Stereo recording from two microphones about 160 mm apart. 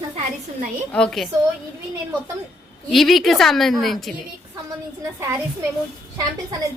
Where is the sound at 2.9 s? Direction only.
Centre (ahead or behind).